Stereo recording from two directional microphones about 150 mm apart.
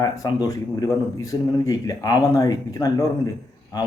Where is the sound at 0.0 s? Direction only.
25° left (ahead or behind).